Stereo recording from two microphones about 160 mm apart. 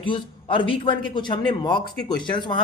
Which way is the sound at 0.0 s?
30° left (ahead or behind).